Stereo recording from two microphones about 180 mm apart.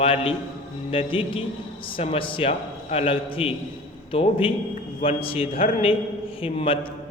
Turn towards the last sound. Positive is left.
turn(degrees=30)  # may be behind; listen again after turning